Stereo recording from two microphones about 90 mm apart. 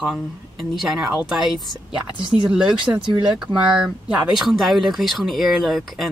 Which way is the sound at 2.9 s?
60° right (ahead or behind).